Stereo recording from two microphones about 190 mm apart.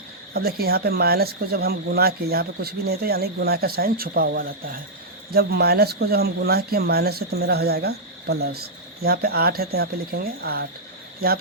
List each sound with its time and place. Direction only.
0.3 s speech: 55° right (ahead or behind)